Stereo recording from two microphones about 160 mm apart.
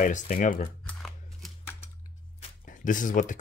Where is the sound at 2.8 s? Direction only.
55° left (ahead or behind).